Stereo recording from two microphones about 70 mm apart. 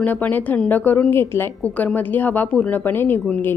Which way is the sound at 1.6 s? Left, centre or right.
Left.